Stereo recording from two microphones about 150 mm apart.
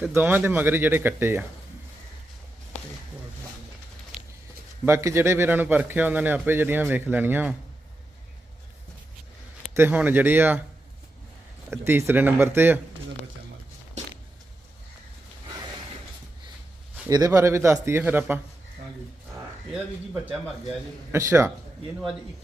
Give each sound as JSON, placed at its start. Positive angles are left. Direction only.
{"t": 0.1, "sound": "a man's voice", "side_deg": -10}
{"t": 4.9, "sound": "a man's voice", "side_deg": -20}
{"t": 9.7, "sound": "a man's voice", "side_deg": -15}
{"t": 11.7, "sound": "a man's voice", "side_deg": -15}
{"t": 17.1, "sound": "a man's voice", "side_deg": -25}
{"t": 21.1, "sound": "a man's voice", "side_deg": -20}